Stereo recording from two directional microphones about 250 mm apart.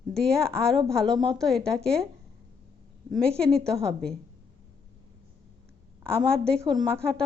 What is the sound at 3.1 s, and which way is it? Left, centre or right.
Speech, centre.